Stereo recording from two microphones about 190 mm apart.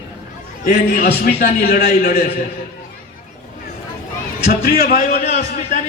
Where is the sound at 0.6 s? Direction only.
45° left (ahead or behind).